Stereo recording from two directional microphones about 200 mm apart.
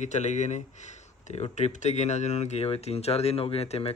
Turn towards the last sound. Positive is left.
turn(degrees=30)  # may be behind; listen again after turning